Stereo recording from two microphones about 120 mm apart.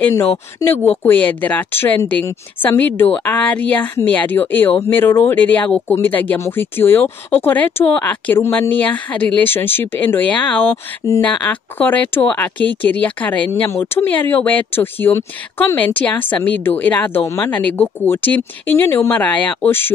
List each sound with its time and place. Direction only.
0.0 s speech: 20° left (ahead or behind)
1.0 s a woman's voice: 15° left (ahead or behind)
11.8 s a woman's voice: 15° left (ahead or behind)